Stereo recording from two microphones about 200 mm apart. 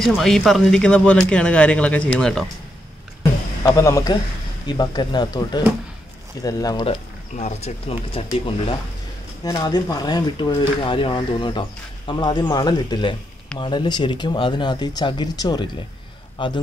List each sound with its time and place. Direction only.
0.0 s speech: centre (ahead or behind)
3.6 s a man's voice: 15° left (ahead or behind)
7.3 s speech: 35° left (ahead or behind)